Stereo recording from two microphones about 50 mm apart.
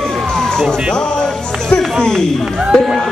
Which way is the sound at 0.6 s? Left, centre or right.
Centre.